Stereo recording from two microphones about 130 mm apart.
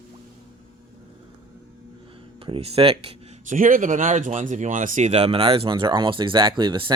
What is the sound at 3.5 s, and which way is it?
Speech, 90° right.